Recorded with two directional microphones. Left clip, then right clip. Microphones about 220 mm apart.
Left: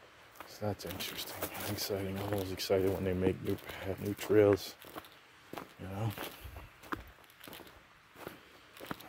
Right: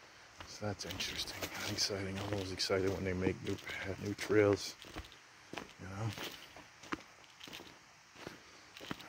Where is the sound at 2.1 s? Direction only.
5° left (ahead or behind).